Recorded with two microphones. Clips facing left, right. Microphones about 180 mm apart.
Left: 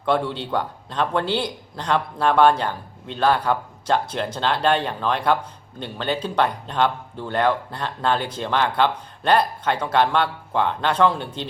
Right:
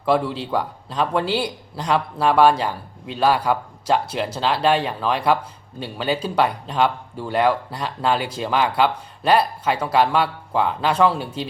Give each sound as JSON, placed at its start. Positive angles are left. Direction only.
{"t": 0.0, "sound": "a man's voice", "side_deg": -5}